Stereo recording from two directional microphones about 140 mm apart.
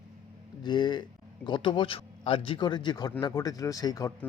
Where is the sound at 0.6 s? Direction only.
30° left (ahead or behind).